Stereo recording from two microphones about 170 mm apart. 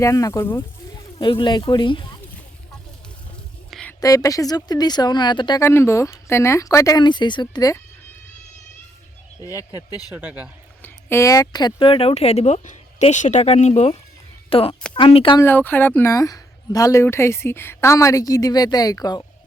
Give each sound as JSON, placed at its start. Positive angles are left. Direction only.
{"t": 0.0, "sound": "a woman's voice", "side_deg": 20}
{"t": 1.2, "sound": "speech", "side_deg": 30}
{"t": 3.7, "sound": "a sound", "side_deg": 5}
{"t": 4.0, "sound": "speech", "side_deg": 20}
{"t": 5.6, "sound": "a woman's voice", "side_deg": 15}
{"t": 10.1, "sound": "speech", "side_deg": -10}
{"t": 10.8, "sound": "speech", "side_deg": 15}
{"t": 15.4, "sound": "a woman's voice", "side_deg": 10}